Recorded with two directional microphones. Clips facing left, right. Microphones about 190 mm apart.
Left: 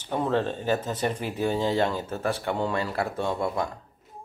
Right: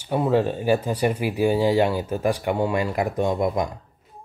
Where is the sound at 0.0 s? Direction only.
10° right (ahead or behind).